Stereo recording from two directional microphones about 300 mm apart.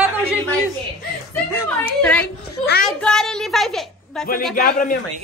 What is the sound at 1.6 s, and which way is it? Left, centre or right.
A woman's voice, centre.